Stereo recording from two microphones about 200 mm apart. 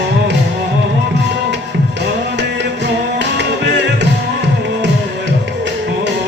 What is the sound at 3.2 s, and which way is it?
Music, 60° right (ahead or behind).